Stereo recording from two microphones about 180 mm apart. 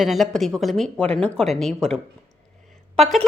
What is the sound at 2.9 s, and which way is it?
Speech, centre (ahead or behind).